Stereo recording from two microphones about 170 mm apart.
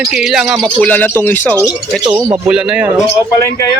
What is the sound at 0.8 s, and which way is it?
Speech, 10° left (ahead or behind).